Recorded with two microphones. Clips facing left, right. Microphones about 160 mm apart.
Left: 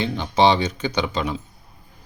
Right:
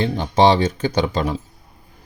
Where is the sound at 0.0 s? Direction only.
45° right (ahead or behind).